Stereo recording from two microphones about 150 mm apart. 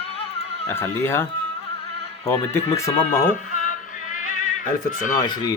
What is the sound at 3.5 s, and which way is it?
Music, 60° left (ahead or behind).